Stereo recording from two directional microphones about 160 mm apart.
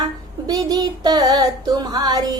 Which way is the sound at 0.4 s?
25° right (ahead or behind).